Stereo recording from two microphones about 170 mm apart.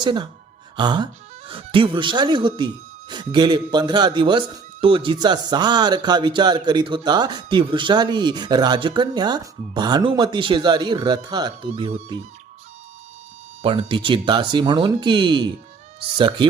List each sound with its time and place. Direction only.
0.0 s speech: 25° right (ahead or behind)
11.7 s speech: 35° right (ahead or behind)
13.6 s speech: 30° right (ahead or behind)